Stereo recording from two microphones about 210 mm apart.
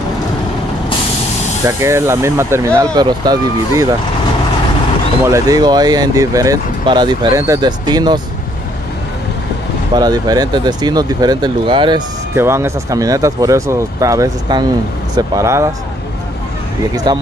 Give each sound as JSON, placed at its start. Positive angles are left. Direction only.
{"t": 1.7, "sound": "speech", "side_deg": -15}
{"t": 5.2, "sound": "speech", "side_deg": -15}
{"t": 9.9, "sound": "speech", "side_deg": -20}
{"t": 16.9, "sound": "speech", "side_deg": -20}